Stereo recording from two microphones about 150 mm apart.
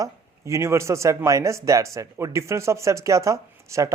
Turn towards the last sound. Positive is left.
turn(degrees=-20)  # may be behind; listen again after turning